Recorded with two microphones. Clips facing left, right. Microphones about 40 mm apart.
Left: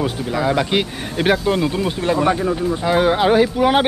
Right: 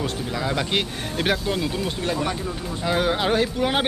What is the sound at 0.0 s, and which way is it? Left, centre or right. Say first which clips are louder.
Speech: left 6 dB; centre.